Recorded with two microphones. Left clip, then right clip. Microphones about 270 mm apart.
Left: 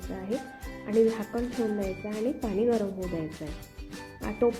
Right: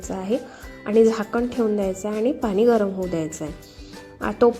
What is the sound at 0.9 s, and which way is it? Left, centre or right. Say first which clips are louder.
A woman's voice: right 7 dB; right.